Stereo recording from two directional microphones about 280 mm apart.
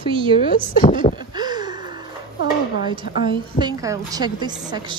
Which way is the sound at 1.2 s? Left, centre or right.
Centre.